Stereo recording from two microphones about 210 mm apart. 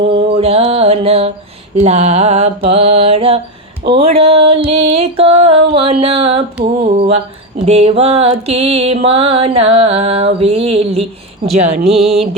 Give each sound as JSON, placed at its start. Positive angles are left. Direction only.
{"t": 0.1, "sound": "music", "side_deg": -30}
{"t": 11.4, "sound": "speech", "side_deg": -30}